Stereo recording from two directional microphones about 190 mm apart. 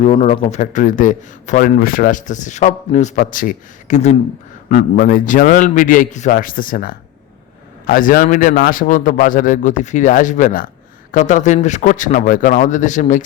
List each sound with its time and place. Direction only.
0.0 s a man's voice: 40° left (ahead or behind)